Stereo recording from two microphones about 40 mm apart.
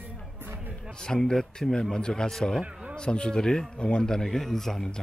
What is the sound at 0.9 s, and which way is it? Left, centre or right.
A man's voice, centre.